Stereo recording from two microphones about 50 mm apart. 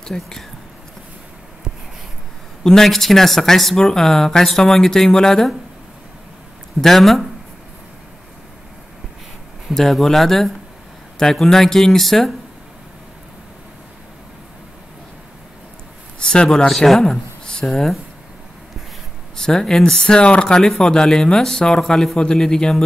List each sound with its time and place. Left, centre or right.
0.0 s speech: centre
2.6 s speech: centre
6.8 s speech: centre
9.7 s speech: centre
16.2 s speech: centre
17.1 s speech: centre
19.3 s speech: centre